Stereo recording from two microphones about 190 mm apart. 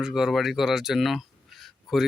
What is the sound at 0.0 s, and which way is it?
Speech, 5° right (ahead or behind).